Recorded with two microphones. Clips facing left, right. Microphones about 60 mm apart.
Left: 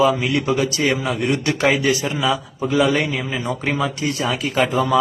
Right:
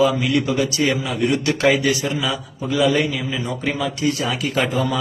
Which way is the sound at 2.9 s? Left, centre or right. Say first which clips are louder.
Even; left.